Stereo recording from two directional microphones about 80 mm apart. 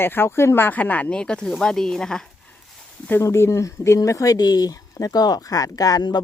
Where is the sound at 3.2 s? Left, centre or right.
Left.